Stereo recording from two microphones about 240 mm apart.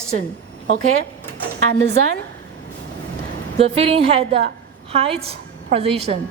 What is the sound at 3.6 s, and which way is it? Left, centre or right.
A woman's voice, right.